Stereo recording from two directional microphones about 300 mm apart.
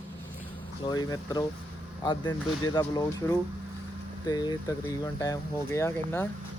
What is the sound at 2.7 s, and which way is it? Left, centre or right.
Speech, centre.